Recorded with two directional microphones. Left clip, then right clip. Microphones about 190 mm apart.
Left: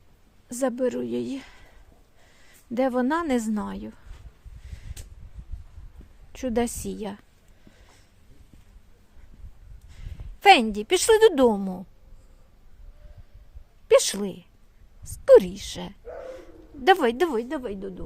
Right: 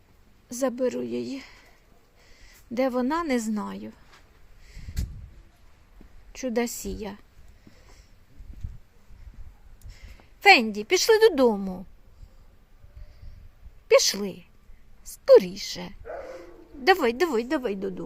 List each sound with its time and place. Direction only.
0.4 s a woman's voice: 15° left (ahead or behind)
6.3 s a woman's voice: 15° left (ahead or behind)
9.9 s a woman's voice: 10° left (ahead or behind)
13.8 s a woman's voice: 15° left (ahead or behind)
17.3 s a woman's voice: 10° right (ahead or behind)